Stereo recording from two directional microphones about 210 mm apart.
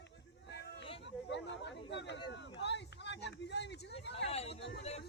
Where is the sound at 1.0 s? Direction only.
55° left (ahead or behind).